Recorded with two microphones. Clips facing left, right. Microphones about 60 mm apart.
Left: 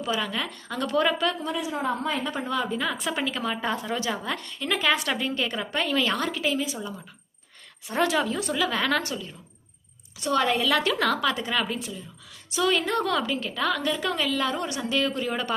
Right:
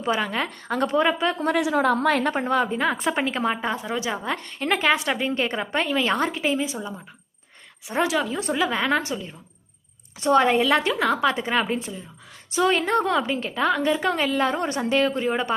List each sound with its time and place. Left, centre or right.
0.0 s a woman's voice: right
0.9 s a woman's voice: right
1.4 s a woman's voice: right
2.3 s a woman's voice: right
3.6 s a woman's voice: centre
8.0 s a woman's voice: centre
8.4 s a woman's voice: right
10.9 s a woman's voice: centre
11.2 s a woman's voice: right